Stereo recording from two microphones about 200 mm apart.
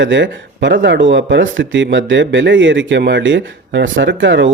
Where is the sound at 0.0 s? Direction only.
65° right (ahead or behind).